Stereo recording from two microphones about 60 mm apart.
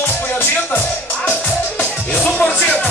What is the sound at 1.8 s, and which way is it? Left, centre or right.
Music, centre.